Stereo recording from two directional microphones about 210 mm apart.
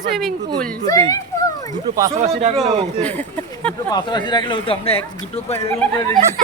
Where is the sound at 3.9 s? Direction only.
20° left (ahead or behind).